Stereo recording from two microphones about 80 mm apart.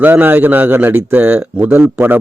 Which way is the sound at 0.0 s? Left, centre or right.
Right.